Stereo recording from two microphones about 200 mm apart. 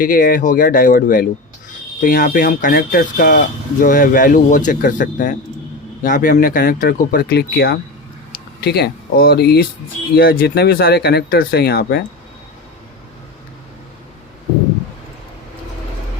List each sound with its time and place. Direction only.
0.0 s speech: 45° left (ahead or behind)